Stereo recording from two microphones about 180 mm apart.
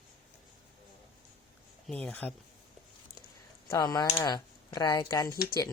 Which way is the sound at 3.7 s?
20° left (ahead or behind).